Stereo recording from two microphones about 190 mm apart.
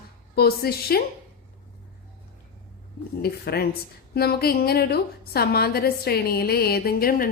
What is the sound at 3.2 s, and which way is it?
A woman's voice, 55° left (ahead or behind).